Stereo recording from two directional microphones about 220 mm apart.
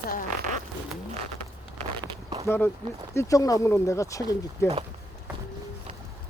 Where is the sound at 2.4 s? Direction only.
10° left (ahead or behind).